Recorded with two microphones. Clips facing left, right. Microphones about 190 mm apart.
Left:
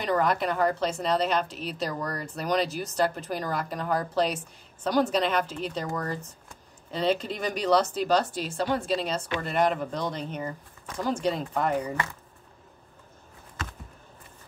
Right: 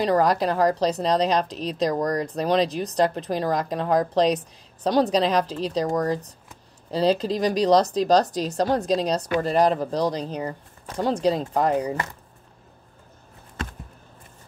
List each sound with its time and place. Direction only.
0.0 s a woman's voice: 35° right (ahead or behind)